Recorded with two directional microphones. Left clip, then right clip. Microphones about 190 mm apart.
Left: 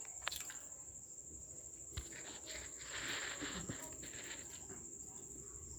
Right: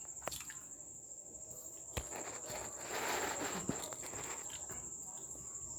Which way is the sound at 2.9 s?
80° right.